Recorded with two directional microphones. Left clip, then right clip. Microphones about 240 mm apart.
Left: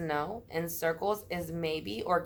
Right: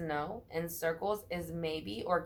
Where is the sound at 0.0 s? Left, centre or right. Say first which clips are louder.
Left 4 dB; left.